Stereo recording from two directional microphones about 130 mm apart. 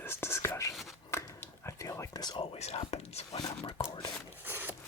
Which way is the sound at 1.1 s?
20° left (ahead or behind).